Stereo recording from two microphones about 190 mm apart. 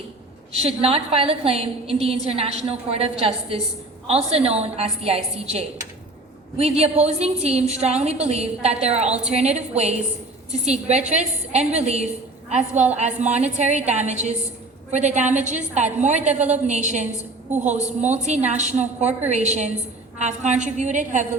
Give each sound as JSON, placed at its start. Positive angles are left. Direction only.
{"t": 0.5, "sound": "a woman's voice", "side_deg": -30}
{"t": 6.6, "sound": "a woman's voice", "side_deg": -35}
{"t": 18.3, "sound": "a woman's voice", "side_deg": -35}